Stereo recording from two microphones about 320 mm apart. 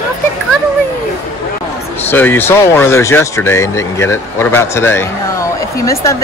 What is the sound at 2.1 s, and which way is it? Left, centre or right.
A woman's voice, centre.